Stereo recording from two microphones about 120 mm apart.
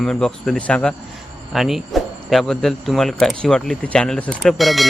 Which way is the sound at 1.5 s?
5° right (ahead or behind).